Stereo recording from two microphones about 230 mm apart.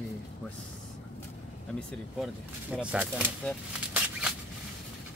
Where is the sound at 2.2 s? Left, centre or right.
Centre.